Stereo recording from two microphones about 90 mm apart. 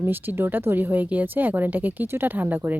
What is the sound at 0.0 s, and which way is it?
A woman's voice, 20° right (ahead or behind).